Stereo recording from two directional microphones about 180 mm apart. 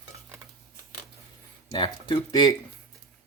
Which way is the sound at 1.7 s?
30° left (ahead or behind).